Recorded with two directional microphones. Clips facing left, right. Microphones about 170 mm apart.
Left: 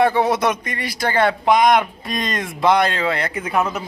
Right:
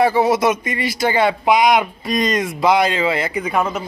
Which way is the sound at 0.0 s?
5° right (ahead or behind).